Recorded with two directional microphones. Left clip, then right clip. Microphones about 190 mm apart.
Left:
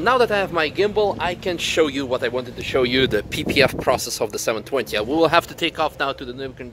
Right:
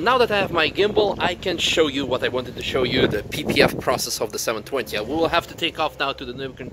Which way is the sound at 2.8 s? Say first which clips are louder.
Left 1 dB; 60° left (ahead or behind).